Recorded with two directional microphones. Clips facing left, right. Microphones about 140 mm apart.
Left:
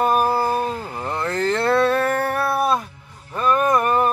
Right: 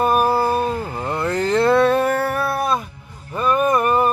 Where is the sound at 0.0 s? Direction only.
5° right (ahead or behind).